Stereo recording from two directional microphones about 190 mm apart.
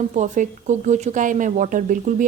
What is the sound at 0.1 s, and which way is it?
A woman's voice, 40° right (ahead or behind).